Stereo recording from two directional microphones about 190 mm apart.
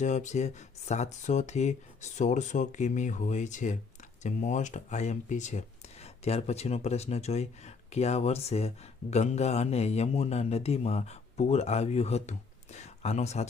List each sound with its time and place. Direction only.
0.0 s speech: 40° left (ahead or behind)